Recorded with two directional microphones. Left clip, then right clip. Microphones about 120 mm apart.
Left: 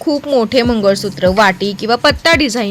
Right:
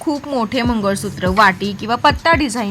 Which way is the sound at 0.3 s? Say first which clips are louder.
Left 8 dB; 45° left (ahead or behind).